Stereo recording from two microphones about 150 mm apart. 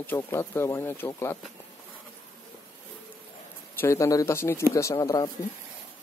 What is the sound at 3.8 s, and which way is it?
Speech, 20° left (ahead or behind).